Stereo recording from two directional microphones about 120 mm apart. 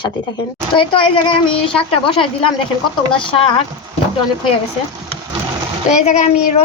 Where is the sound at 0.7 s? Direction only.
45° left (ahead or behind).